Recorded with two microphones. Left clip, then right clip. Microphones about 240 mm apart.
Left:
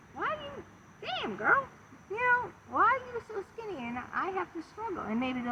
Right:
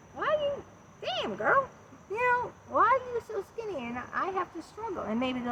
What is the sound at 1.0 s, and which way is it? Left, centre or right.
Dog, centre.